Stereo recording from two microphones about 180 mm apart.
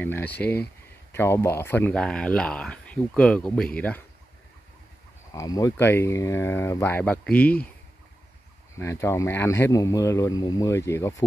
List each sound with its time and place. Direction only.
0.0 s speech: 10° left (ahead or behind)
5.3 s speech: 20° left (ahead or behind)
8.7 s speech: 15° left (ahead or behind)